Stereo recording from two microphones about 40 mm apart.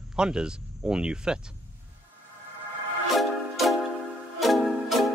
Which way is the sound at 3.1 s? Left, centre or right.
Centre.